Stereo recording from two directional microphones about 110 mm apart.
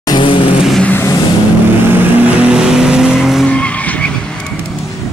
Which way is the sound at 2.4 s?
5° right (ahead or behind).